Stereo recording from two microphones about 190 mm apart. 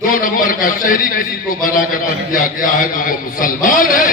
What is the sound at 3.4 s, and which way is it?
Speech, 45° left (ahead or behind).